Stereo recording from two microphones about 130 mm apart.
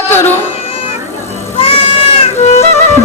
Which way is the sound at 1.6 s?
45° left (ahead or behind).